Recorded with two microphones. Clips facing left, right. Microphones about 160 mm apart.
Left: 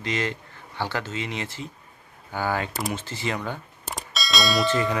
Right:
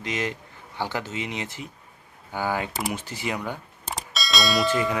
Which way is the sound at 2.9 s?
15° right (ahead or behind).